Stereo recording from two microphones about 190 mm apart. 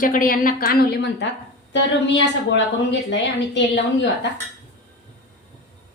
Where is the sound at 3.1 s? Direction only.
70° left (ahead or behind).